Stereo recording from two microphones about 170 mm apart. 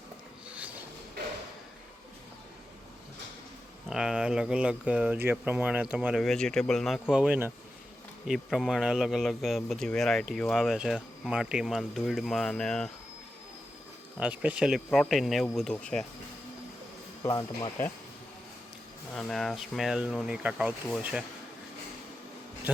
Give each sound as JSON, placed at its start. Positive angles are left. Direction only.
{"t": 3.8, "sound": "speech", "side_deg": -5}
{"t": 14.2, "sound": "speech", "side_deg": -5}
{"t": 17.2, "sound": "speech", "side_deg": 20}
{"t": 19.1, "sound": "speech", "side_deg": 0}
{"t": 22.7, "sound": "speech", "side_deg": -10}